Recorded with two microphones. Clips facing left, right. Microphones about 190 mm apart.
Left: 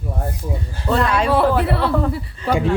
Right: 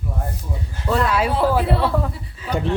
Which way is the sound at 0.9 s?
5° right (ahead or behind).